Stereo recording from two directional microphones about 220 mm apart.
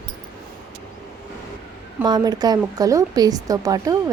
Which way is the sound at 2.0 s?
20° right (ahead or behind).